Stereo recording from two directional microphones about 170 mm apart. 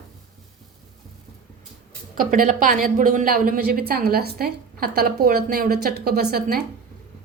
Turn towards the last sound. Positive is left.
turn(degrees=-65)  # may be behind; listen again after turning